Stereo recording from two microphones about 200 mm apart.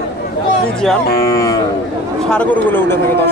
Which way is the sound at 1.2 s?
15° left (ahead or behind).